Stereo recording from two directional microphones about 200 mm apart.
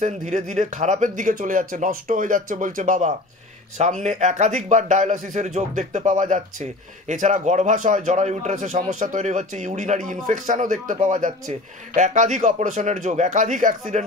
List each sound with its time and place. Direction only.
0.0 s speech: 35° right (ahead or behind)